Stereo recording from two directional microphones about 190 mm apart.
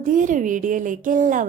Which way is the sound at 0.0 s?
45° right (ahead or behind).